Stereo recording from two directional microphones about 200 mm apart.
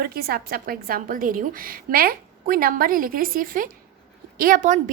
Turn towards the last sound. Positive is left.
turn(degrees=-40)  # may be behind; listen again after turning